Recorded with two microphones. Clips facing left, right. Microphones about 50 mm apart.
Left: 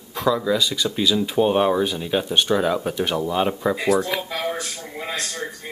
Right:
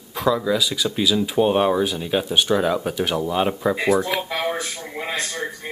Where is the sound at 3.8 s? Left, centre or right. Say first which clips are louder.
Right 1 dB; right.